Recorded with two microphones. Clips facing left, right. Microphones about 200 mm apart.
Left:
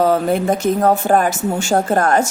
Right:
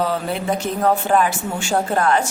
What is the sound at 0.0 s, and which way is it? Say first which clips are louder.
A woman's voice: left 7 dB; 45° left (ahead or behind).